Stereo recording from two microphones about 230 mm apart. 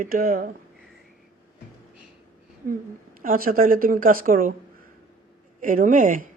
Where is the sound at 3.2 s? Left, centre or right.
Right.